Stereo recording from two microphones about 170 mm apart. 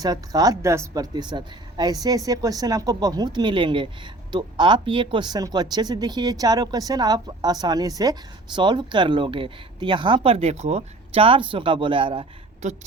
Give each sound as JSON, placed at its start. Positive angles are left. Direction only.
{"t": 0.0, "sound": "speech", "side_deg": -20}
{"t": 12.6, "sound": "a woman's voice", "side_deg": -45}